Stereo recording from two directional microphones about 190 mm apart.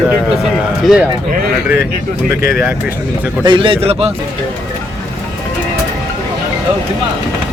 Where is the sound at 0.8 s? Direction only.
5° right (ahead or behind).